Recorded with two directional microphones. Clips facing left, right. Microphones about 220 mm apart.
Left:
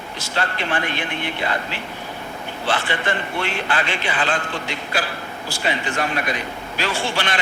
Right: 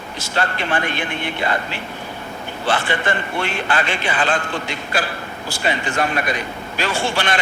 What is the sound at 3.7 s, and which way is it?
Speech, 50° right (ahead or behind).